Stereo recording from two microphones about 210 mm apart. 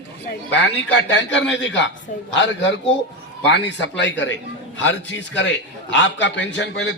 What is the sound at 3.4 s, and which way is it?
Speech, 60° left (ahead or behind).